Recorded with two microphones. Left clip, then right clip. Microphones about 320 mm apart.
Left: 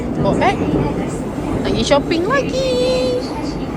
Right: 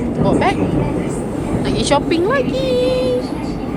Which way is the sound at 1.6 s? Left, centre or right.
Centre.